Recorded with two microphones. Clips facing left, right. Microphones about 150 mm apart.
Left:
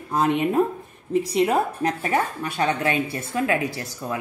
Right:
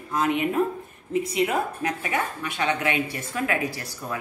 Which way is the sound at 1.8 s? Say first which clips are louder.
Left 4 dB; 40° left (ahead or behind).